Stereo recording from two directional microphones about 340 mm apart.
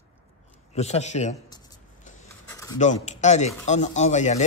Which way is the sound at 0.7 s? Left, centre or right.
Centre.